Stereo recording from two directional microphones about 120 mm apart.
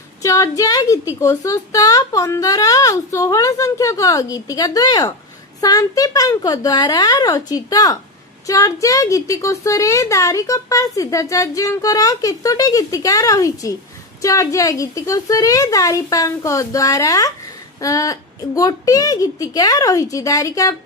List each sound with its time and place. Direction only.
0.2 s a woman's voice: 25° left (ahead or behind)